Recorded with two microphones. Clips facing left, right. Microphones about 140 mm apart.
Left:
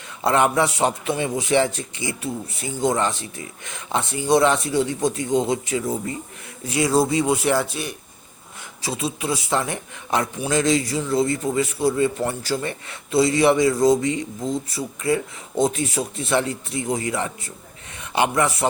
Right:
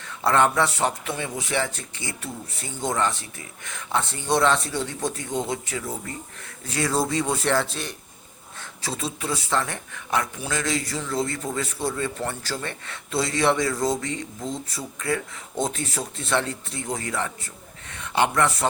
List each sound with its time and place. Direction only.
0.2 s a man's voice: 15° left (ahead or behind)